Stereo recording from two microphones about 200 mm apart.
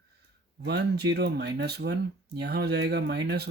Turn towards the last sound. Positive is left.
turn(degrees=-55)  # may be behind; listen again after turning